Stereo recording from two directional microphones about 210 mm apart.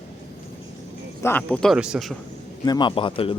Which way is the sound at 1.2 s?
5° left (ahead or behind).